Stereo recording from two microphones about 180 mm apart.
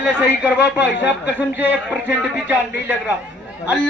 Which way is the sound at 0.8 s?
75° left (ahead or behind).